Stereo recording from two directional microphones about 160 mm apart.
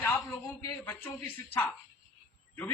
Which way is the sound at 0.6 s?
20° left (ahead or behind).